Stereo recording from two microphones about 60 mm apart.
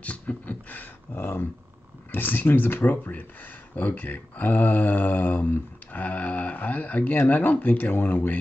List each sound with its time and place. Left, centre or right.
0.0 s speech: left
1.2 s speech: left